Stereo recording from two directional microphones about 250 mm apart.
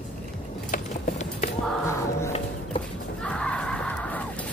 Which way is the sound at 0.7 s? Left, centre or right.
Left.